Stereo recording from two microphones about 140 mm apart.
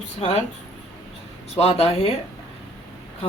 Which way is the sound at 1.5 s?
45° left (ahead or behind).